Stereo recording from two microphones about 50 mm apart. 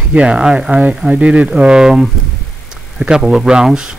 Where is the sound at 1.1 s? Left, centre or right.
Right.